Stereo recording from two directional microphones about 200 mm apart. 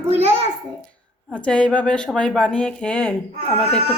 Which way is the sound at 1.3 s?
5° left (ahead or behind).